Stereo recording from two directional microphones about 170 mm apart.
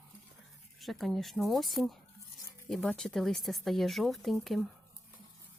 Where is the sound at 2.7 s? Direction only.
5° left (ahead or behind).